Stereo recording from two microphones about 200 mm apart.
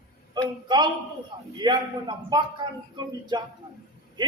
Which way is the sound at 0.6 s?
20° right (ahead or behind).